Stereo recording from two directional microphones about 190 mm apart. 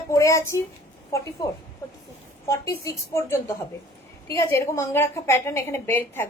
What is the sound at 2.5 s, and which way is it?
A woman's voice, 15° left (ahead or behind).